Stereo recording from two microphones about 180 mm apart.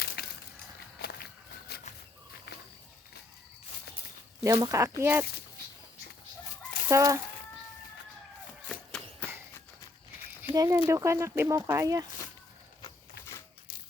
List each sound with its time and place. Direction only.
0.2 s a sound: 60° left (ahead or behind)
0.9 s walk: 60° left (ahead or behind)
4.4 s speech: 15° right (ahead or behind)
6.8 s fowl: 15° right (ahead or behind)
8.7 s a sound: 5° left (ahead or behind)
10.4 s speech: 15° right (ahead or behind)